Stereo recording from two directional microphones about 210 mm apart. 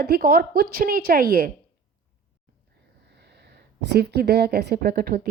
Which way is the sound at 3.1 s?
50° right (ahead or behind).